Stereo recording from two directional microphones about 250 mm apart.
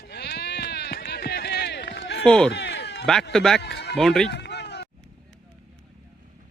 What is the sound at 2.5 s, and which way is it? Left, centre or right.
Run, left.